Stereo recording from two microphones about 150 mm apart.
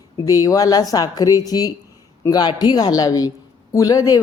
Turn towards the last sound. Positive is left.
turn(degrees=25)  # may be behind; listen again after turning